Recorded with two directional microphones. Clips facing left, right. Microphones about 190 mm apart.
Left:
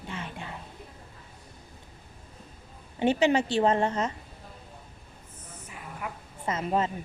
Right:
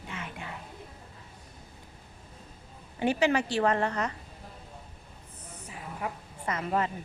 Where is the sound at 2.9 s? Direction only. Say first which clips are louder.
Left 3 dB; 25° left (ahead or behind).